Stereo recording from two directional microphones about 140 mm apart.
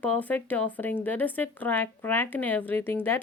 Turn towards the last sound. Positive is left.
turn(degrees=15)  # may be behind; listen again after turning